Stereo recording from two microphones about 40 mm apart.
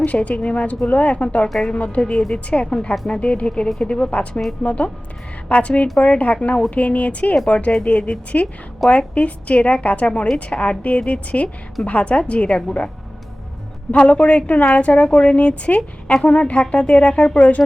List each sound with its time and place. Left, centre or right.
0.0 s a woman's voice: left
13.9 s a woman's voice: left